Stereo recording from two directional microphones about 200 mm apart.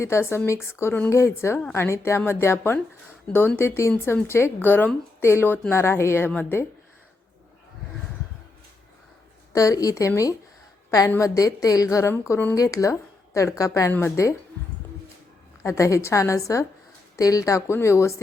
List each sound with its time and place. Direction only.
0.0 s a woman's voice: 15° left (ahead or behind)
9.5 s a woman's voice: 15° left (ahead or behind)
15.6 s a woman's voice: 15° left (ahead or behind)